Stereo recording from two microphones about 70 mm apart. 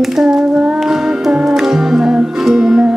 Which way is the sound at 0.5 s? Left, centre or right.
Centre.